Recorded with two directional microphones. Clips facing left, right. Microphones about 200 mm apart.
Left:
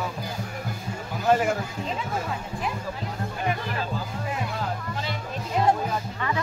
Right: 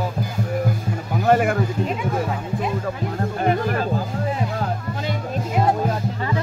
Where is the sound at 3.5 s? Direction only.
50° right (ahead or behind).